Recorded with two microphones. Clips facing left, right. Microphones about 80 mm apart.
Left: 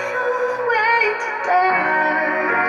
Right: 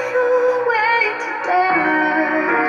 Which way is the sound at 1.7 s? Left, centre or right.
Centre.